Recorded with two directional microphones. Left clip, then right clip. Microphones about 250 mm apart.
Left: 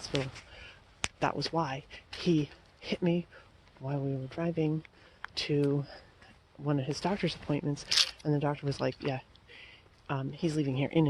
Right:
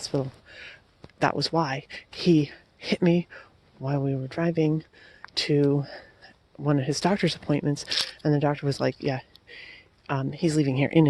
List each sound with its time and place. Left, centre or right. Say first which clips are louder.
0.0 s a sound: right 5 dB; right
1.2 s speech: right 8 dB; right
7.9 s speech: left 4 dB; centre
8.2 s speech: right 7 dB; right